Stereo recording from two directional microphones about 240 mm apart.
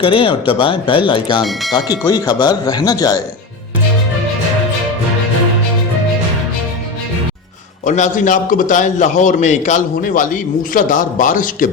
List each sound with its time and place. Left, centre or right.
0.0 s speech: left
7.9 s a man's voice: left